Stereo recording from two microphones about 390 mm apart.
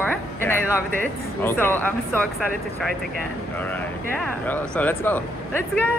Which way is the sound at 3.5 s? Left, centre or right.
Centre.